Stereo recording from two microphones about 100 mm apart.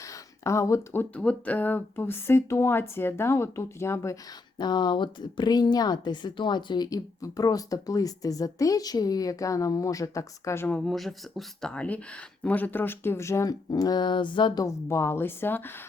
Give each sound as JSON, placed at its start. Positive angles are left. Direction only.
{"t": 0.0, "sound": "a sound", "side_deg": 30}
{"t": 1.1, "sound": "speech", "side_deg": 10}
{"t": 4.5, "sound": "speech", "side_deg": 45}
{"t": 10.7, "sound": "speech", "side_deg": 10}
{"t": 10.9, "sound": "speech", "side_deg": 0}
{"t": 13.7, "sound": "a sound", "side_deg": 40}
{"t": 14.6, "sound": "speech", "side_deg": 30}